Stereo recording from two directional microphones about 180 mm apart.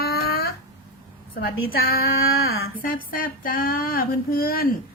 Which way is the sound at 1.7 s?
55° left (ahead or behind).